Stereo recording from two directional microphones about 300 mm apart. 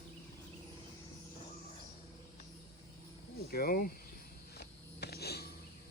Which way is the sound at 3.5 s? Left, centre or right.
Left.